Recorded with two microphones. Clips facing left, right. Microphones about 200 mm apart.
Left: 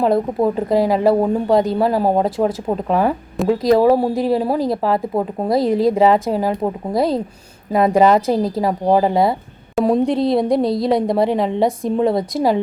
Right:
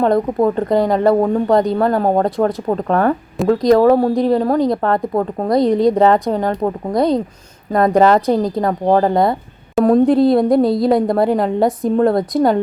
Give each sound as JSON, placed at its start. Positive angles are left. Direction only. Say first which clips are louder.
{"t": 0.0, "sound": "a woman's voice", "louder": "right 2 dB", "side_deg": 5}